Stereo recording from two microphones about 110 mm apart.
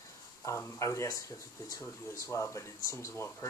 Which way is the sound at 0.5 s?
25° left (ahead or behind).